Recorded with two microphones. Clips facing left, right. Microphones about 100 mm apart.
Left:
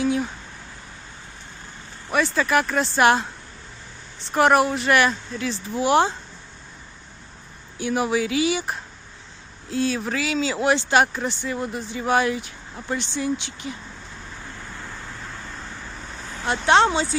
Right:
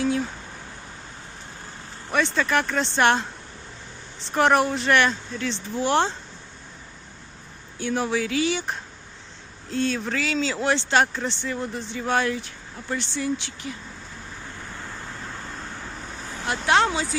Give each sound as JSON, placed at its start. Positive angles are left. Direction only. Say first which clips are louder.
{"t": 2.1, "sound": "speech", "louder": "left 2 dB", "side_deg": 5}
{"t": 4.3, "sound": "speech", "louder": "left 2 dB", "side_deg": 5}
{"t": 7.8, "sound": "speech", "louder": "left 2 dB", "side_deg": 10}
{"t": 16.5, "sound": "speech", "louder": "left 3 dB", "side_deg": 30}